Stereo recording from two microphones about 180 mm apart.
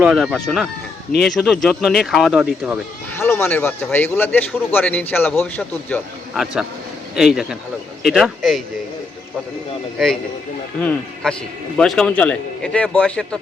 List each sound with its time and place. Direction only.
0.0 s a man's voice: 5° right (ahead or behind)
3.2 s a man's voice: 15° left (ahead or behind)
6.3 s a man's voice: centre (ahead or behind)
10.8 s a man's voice: 5° left (ahead or behind)